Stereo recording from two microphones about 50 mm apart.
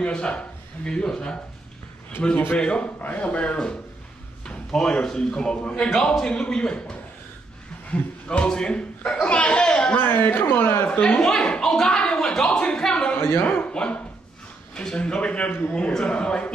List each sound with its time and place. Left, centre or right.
0.0 s a man's voice: left
2.5 s a man's voice: left
9.9 s a man's voice: left
10.9 s speech: left
13.4 s a man's voice: left
13.7 s a man's voice: left